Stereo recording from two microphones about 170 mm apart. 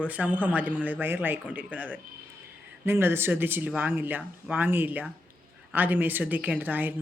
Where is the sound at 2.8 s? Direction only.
15° right (ahead or behind).